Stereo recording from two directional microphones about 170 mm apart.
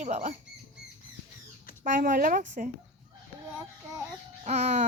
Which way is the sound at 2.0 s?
55° right (ahead or behind).